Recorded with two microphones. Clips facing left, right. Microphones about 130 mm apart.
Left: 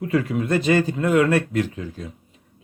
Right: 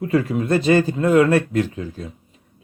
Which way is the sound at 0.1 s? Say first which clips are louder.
Right 2 dB; 35° right (ahead or behind).